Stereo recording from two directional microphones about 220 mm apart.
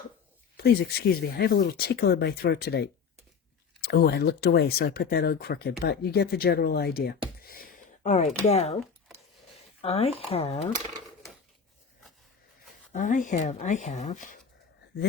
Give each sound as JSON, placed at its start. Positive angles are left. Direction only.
{"t": 0.5, "sound": "speech", "side_deg": 45}
{"t": 7.4, "sound": "a sound", "side_deg": 40}
{"t": 8.4, "sound": "speech", "side_deg": 30}
{"t": 9.8, "sound": "speech", "side_deg": 25}
{"t": 12.9, "sound": "speech", "side_deg": 35}